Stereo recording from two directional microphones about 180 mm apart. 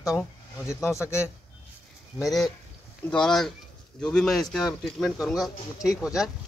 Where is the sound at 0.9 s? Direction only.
15° left (ahead or behind).